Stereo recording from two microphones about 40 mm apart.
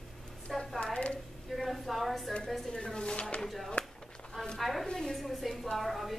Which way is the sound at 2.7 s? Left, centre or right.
Left.